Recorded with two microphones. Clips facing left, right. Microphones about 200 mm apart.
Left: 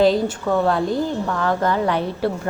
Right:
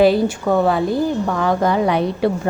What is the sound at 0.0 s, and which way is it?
Speech, 10° right (ahead or behind).